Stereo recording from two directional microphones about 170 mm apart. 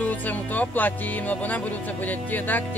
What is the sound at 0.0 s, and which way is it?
Speech, 10° left (ahead or behind).